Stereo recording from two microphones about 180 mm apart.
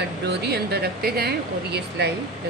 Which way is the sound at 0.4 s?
60° right (ahead or behind).